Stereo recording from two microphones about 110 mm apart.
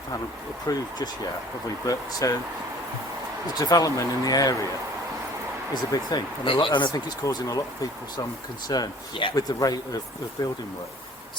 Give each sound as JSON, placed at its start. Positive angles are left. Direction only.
{"t": 0.7, "sound": "speech", "side_deg": 30}
{"t": 1.9, "sound": "speech", "side_deg": 30}
{"t": 3.6, "sound": "speech", "side_deg": 35}
{"t": 5.7, "sound": "speech", "side_deg": 40}
{"t": 7.2, "sound": "speech", "side_deg": 30}
{"t": 9.3, "sound": "speech", "side_deg": 35}